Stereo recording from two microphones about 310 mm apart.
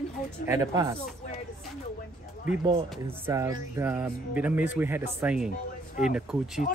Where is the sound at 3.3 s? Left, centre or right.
Centre.